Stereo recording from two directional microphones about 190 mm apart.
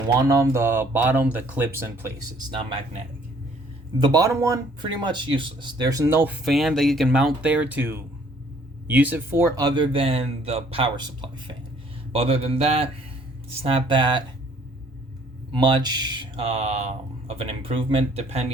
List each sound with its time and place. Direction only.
0.2 s speech: 15° right (ahead or behind)
2.6 s speech: 30° right (ahead or behind)
3.9 s speech: 20° right (ahead or behind)
15.5 s speech: 20° right (ahead or behind)